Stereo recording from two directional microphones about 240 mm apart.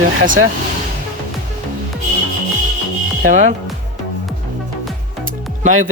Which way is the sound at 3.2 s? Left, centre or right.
Right.